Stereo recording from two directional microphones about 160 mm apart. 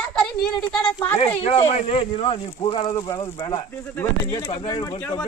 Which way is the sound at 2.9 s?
25° left (ahead or behind).